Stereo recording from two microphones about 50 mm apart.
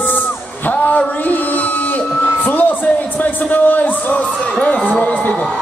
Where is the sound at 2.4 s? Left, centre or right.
Left.